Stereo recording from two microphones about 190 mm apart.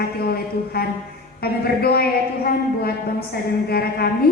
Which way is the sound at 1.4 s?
55° left (ahead or behind).